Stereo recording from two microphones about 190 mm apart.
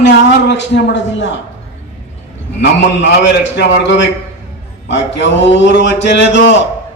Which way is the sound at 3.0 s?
70° left (ahead or behind).